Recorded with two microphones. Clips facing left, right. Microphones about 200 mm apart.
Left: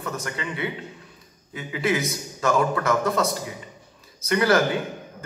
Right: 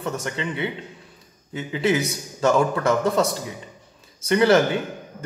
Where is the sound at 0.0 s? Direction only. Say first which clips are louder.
Right 3 dB; 25° right (ahead or behind).